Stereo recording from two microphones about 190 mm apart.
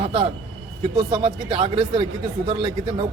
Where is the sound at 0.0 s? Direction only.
30° right (ahead or behind).